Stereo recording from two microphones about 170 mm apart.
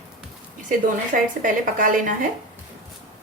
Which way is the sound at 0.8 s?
50° right (ahead or behind).